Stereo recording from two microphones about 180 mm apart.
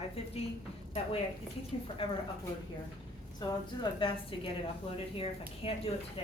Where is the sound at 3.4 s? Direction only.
25° left (ahead or behind).